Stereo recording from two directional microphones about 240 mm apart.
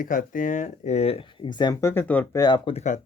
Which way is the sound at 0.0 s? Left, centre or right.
Left.